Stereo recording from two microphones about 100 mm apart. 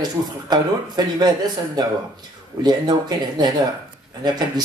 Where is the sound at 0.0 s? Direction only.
45° right (ahead or behind).